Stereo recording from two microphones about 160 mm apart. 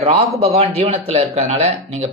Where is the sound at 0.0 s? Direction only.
40° right (ahead or behind).